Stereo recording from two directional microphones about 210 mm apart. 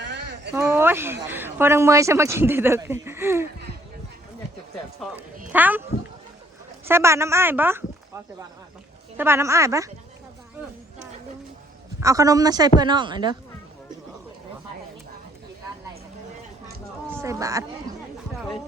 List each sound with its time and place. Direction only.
0.0 s a sound: 55° right (ahead or behind)
0.5 s speech: 10° right (ahead or behind)
5.0 s speech: centre (ahead or behind)
6.8 s speech: 10° right (ahead or behind)
11.9 s speech: 15° right (ahead or behind)
17.1 s speech: 15° right (ahead or behind)